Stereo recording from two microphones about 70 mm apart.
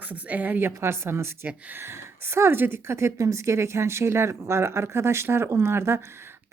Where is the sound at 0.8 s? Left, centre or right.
Right.